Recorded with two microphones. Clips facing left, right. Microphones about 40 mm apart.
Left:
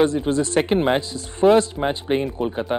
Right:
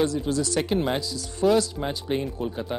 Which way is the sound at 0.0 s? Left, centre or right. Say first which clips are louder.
Left 5 dB; left.